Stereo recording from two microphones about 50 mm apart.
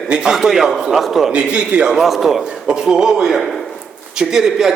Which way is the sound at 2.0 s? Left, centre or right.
Centre.